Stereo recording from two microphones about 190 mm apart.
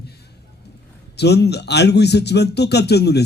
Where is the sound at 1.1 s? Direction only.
60° left (ahead or behind).